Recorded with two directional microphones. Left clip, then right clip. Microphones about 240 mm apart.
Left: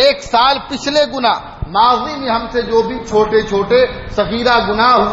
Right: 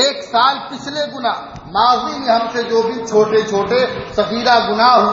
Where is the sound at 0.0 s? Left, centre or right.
Left.